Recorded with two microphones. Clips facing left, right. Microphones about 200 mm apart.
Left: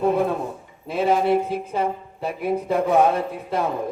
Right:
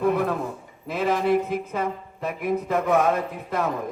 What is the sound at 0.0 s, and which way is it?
A man's voice, 25° left (ahead or behind).